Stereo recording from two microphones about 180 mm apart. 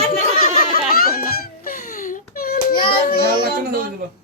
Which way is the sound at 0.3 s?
55° left (ahead or behind).